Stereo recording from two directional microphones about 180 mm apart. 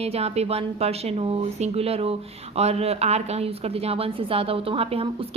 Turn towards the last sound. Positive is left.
turn(degrees=-30)  # may be behind; listen again after turning